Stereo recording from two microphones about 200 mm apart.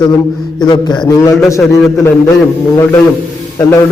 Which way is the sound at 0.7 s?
20° left (ahead or behind).